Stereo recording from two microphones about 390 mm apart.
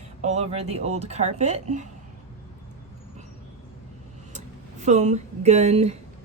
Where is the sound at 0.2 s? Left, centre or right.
Centre.